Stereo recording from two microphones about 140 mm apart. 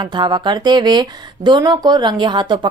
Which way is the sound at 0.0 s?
35° right (ahead or behind).